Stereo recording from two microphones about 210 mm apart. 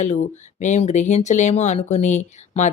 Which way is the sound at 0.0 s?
35° left (ahead or behind).